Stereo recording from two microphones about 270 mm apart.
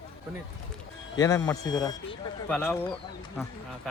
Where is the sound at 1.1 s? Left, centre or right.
Centre.